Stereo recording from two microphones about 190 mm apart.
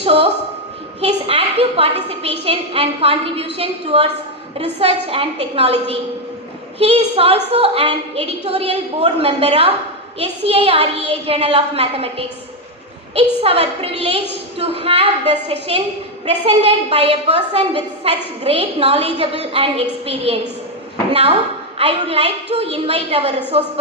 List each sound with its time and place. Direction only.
0.0 s a woman's voice: 30° right (ahead or behind)